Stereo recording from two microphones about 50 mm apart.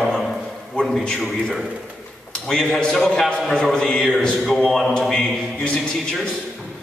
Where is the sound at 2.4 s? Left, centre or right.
Centre.